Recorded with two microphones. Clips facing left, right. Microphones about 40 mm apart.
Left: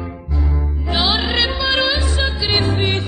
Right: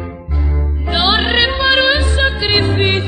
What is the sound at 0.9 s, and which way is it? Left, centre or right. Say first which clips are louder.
Music: right 5 dB; right.